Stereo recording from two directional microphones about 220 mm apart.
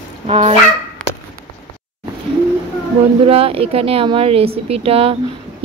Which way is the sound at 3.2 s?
25° right (ahead or behind).